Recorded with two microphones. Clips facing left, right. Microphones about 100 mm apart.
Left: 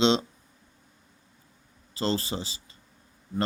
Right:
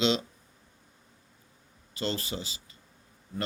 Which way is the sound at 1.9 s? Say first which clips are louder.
Left 4 dB; 30° left (ahead or behind).